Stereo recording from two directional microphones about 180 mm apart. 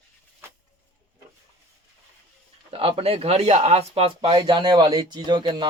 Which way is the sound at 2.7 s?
30° right (ahead or behind).